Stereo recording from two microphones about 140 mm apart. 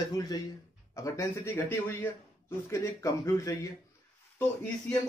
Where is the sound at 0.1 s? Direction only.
25° left (ahead or behind).